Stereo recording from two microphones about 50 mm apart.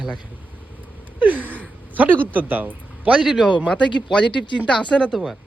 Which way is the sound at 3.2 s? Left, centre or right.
Centre.